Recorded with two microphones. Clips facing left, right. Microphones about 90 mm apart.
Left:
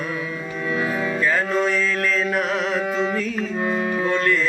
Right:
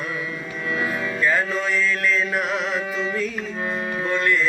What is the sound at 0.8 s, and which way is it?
Music, 15° left (ahead or behind).